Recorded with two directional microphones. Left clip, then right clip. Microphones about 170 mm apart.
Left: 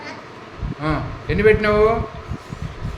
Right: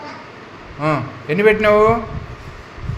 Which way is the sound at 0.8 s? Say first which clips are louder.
Right 5 dB; 25° right (ahead or behind).